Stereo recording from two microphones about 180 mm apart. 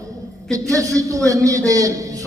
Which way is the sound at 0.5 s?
20° right (ahead or behind).